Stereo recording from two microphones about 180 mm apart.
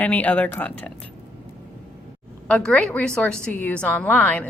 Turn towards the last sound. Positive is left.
turn(degrees=10)  # may be behind; listen again after turning